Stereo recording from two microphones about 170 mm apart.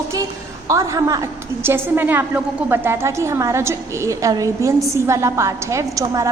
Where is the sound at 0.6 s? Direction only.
20° right (ahead or behind).